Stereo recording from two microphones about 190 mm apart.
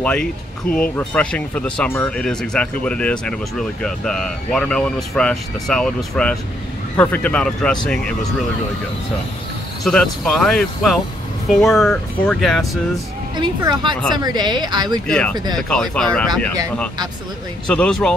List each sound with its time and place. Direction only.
0.0 s speech: 5° left (ahead or behind)
9.8 s speech: 5° left (ahead or behind)
13.6 s a woman's voice: 20° right (ahead or behind)
15.0 s speech: 5° left (ahead or behind)
17.6 s speech: 5° left (ahead or behind)